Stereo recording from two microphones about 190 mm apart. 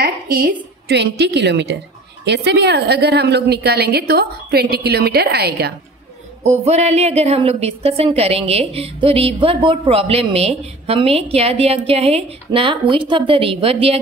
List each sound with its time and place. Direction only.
0.0 s a woman's voice: 50° right (ahead or behind)
6.4 s a woman's voice: 35° right (ahead or behind)